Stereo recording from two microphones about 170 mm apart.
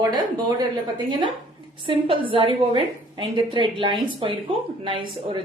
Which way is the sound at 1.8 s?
30° right (ahead or behind).